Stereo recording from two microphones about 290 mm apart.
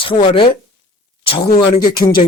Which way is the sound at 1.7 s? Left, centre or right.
Centre.